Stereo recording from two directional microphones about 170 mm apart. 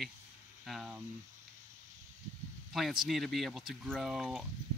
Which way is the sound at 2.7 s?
Centre (ahead or behind).